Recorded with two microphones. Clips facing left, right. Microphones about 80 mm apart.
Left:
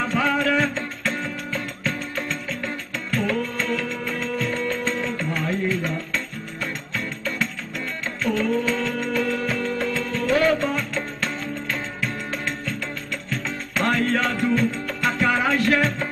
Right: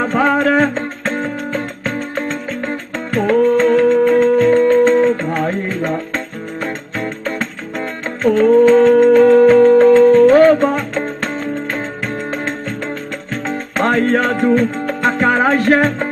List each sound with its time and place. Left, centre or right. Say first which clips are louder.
0.0 s music: right 8 dB; right
12.3 s music: right 7 dB; right